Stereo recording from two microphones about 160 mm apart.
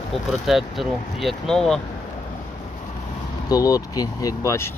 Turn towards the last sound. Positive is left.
turn(degrees=15)  # may be behind; listen again after turning